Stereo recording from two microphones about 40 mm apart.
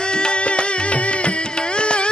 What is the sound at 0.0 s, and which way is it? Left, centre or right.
Music, left.